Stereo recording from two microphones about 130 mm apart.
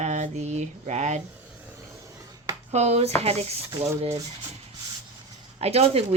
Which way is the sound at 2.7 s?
55° right (ahead or behind).